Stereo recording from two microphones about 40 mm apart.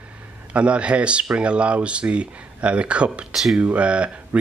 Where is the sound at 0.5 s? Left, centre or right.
Right.